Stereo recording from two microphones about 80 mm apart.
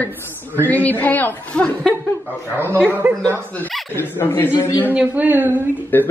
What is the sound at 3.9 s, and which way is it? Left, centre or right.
Speech, left.